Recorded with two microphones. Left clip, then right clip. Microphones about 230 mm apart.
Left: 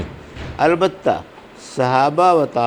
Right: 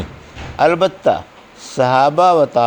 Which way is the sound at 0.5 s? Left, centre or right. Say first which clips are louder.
Right 2 dB; right.